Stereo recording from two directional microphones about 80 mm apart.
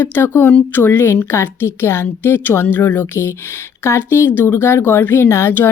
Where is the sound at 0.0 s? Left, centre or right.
Left.